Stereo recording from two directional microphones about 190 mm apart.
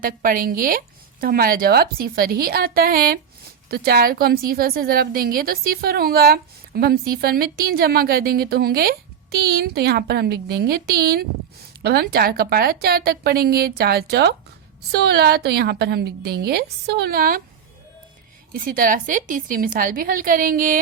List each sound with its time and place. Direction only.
0.0 s a woman's voice: 45° right (ahead or behind)
18.5 s a woman's voice: 50° right (ahead or behind)